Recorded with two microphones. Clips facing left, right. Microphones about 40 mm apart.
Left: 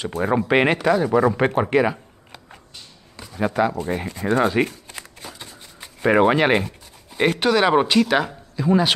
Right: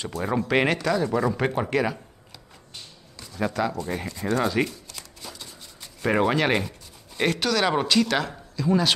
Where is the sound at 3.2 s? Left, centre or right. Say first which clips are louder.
Left 5 dB; left.